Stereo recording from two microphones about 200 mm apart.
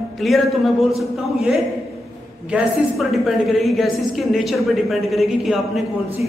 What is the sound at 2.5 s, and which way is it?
A woman's voice, centre (ahead or behind).